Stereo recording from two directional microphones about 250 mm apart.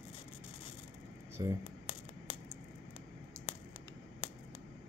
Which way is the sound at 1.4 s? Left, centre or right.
Centre.